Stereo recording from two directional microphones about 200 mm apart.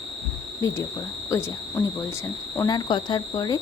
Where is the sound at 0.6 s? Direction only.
15° left (ahead or behind).